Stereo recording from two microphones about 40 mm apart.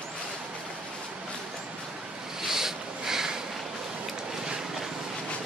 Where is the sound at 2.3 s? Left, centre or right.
Centre.